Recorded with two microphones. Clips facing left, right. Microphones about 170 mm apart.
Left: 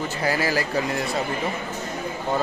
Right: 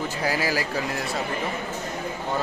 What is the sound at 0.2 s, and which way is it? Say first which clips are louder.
Speech: left 2 dB; 5° right (ahead or behind).